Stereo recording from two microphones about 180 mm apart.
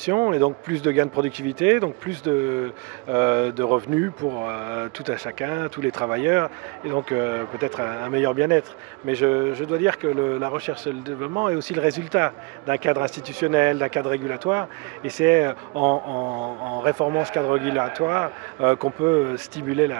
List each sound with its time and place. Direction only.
0.0 s a man's voice: 15° right (ahead or behind)
15.7 s a sound: 40° right (ahead or behind)
17.1 s a man's voice: 15° right (ahead or behind)